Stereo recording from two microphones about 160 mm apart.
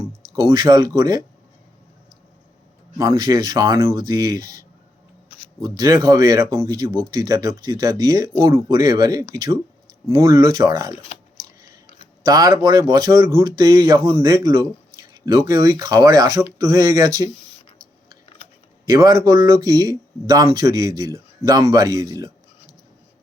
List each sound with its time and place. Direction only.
0.3 s speech: 30° right (ahead or behind)
3.0 s speech: 20° right (ahead or behind)
5.6 s speech: 25° right (ahead or behind)
12.2 s speech: 20° right (ahead or behind)
18.9 s speech: 25° right (ahead or behind)